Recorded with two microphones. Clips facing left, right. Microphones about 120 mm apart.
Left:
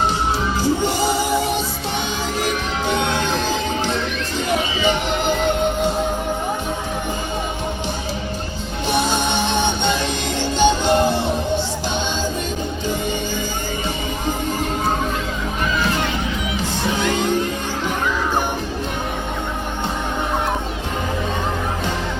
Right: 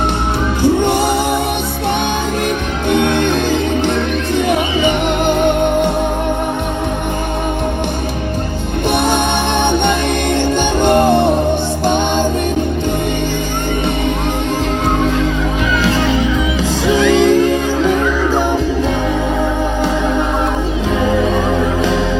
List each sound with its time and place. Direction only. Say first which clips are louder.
0.6 s music: right 8 dB; 60° right (ahead or behind)
2.9 s music: right 8 dB; 60° right (ahead or behind)
8.9 s music: right 4 dB; 60° right (ahead or behind)
15.8 s music: right 7 dB; 90° right